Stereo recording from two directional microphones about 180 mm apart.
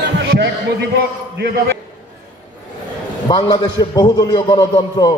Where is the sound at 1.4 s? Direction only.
70° right (ahead or behind).